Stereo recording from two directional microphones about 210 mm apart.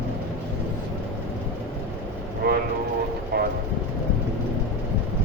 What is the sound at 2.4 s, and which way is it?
Vehicle, 50° right (ahead or behind).